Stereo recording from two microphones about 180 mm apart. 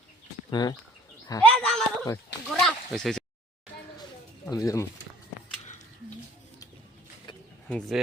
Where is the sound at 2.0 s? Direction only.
15° left (ahead or behind).